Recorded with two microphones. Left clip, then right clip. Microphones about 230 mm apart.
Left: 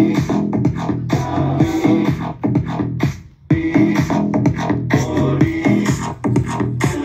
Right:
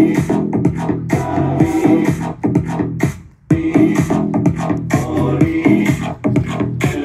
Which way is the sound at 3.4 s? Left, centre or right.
Left.